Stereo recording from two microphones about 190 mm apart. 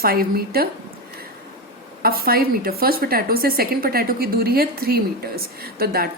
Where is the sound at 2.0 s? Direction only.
50° right (ahead or behind).